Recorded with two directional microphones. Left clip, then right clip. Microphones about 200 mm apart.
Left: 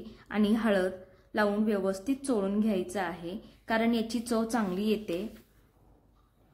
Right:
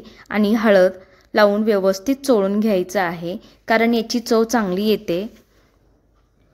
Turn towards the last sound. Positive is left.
turn(degrees=-45)  # may be behind; listen again after turning